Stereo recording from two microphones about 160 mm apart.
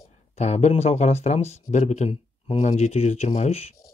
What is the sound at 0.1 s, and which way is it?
Speech, 45° left (ahead or behind).